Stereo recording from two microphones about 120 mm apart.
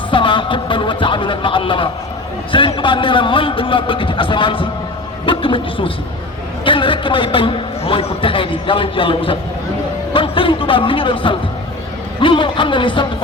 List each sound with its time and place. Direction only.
0.1 s a man's voice: 45° left (ahead or behind)